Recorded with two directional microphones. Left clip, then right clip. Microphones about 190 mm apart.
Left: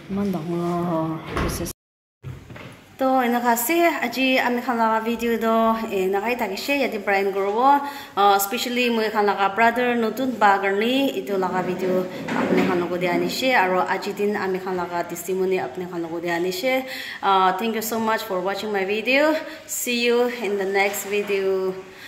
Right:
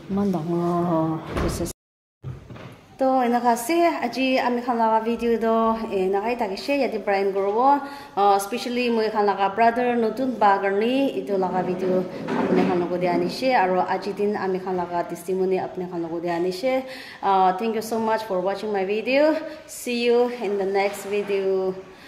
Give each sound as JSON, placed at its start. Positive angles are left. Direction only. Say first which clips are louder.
{"t": 0.1, "sound": "a woman's voice", "louder": "right 2 dB", "side_deg": -10}
{"t": 3.2, "sound": "a woman's voice", "louder": "left 1 dB", "side_deg": -10}
{"t": 12.9, "sound": "a woman's voice", "louder": "even", "side_deg": -10}